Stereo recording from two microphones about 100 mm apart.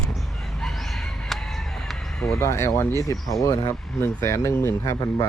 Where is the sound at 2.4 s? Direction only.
30° left (ahead or behind).